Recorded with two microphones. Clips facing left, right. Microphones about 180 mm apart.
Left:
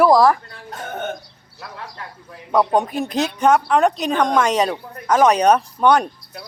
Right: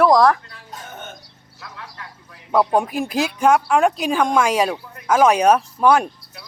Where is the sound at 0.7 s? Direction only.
60° left (ahead or behind).